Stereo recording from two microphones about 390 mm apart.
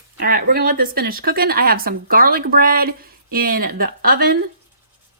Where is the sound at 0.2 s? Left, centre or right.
Right.